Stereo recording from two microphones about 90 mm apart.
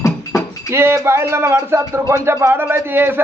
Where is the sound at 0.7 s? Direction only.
30° right (ahead or behind).